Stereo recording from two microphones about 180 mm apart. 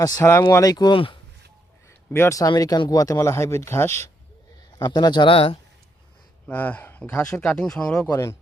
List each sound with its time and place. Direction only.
0.0 s speech: 15° left (ahead or behind)
2.1 s speech: 15° left (ahead or behind)
6.5 s speech: 10° left (ahead or behind)
8.0 s speech: 20° left (ahead or behind)